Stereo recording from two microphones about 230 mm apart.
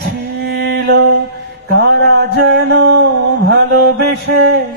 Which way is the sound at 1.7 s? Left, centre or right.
Right.